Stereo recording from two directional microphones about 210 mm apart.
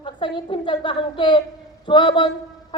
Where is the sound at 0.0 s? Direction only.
20° left (ahead or behind).